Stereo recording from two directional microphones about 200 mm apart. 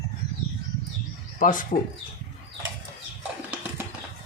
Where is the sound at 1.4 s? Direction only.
40° left (ahead or behind).